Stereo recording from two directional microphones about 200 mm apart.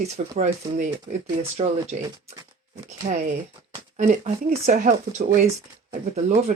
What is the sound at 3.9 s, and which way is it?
Speech, 35° right (ahead or behind).